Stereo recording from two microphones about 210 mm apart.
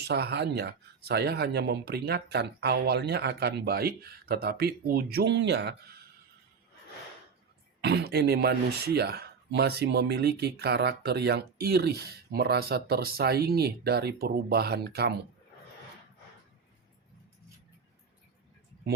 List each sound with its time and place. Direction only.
0.1 s speech: 50° right (ahead or behind)
7.8 s speech: 50° right (ahead or behind)